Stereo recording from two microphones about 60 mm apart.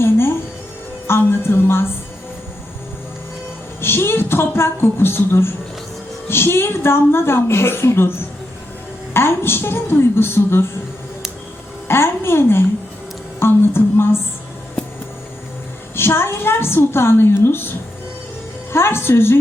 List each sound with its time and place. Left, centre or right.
1.2 s a sound: left
3.8 s a woman's voice: left
9.1 s a woman's voice: left
11.9 s a woman's voice: left
13.4 s a sound: left
16.0 s a woman's voice: left
18.7 s a woman's voice: left